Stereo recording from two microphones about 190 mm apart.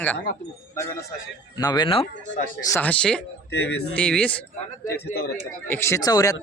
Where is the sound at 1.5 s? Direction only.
20° left (ahead or behind).